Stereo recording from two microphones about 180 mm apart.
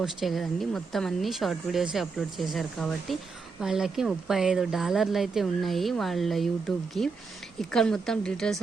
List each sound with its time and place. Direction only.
0.0 s speech: centre (ahead or behind)